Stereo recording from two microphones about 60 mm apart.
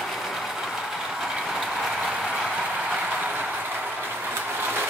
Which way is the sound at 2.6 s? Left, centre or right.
Centre.